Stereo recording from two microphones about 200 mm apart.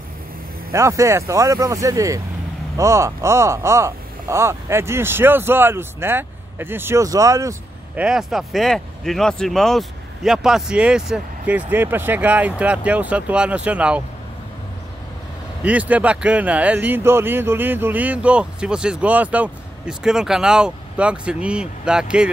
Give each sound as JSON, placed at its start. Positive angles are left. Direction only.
{"t": 0.7, "sound": "speech", "side_deg": -15}
{"t": 8.0, "sound": "speech", "side_deg": 0}
{"t": 15.6, "sound": "speech", "side_deg": -5}